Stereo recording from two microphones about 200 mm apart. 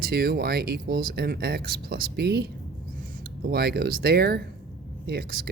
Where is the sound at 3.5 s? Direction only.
55° right (ahead or behind).